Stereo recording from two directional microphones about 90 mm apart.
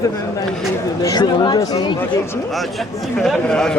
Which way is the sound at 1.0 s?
50° left (ahead or behind).